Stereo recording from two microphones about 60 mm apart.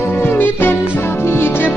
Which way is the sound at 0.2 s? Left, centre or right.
Left.